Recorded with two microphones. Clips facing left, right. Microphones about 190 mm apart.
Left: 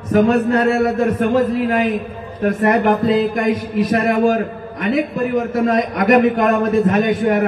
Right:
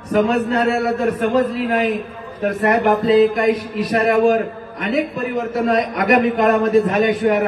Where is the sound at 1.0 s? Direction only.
50° left (ahead or behind).